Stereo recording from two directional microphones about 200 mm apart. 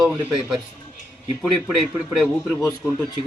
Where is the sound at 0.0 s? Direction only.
5° right (ahead or behind).